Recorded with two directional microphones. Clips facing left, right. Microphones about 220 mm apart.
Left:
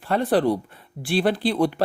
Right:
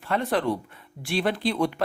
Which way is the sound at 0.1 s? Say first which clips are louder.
Left 5 dB; 35° left (ahead or behind).